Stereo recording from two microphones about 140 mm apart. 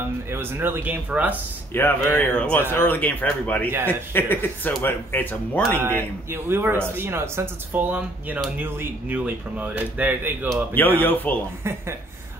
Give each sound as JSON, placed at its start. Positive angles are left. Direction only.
{"t": 0.3, "sound": "speech", "side_deg": -15}
{"t": 1.7, "sound": "speech", "side_deg": 15}
{"t": 5.8, "sound": "speech", "side_deg": -15}
{"t": 11.0, "sound": "speech", "side_deg": 15}